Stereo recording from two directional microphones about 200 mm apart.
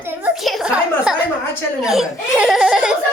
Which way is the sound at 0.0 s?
10° right (ahead or behind).